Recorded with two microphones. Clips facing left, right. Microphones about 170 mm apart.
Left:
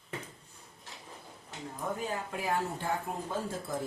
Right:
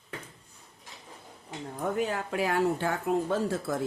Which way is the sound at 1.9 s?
75° right (ahead or behind).